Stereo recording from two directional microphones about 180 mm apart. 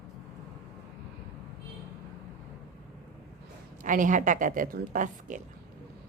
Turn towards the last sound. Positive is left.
turn(degrees=-45)  # may be behind; listen again after turning